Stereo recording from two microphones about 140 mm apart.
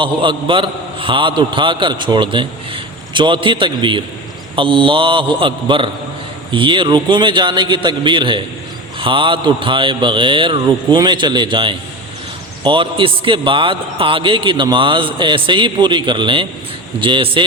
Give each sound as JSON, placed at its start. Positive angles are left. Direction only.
{"t": 0.0, "sound": "a man's voice", "side_deg": -35}